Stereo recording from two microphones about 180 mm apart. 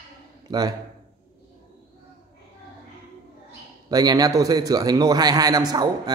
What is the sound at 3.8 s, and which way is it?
A man's voice, 20° right (ahead or behind).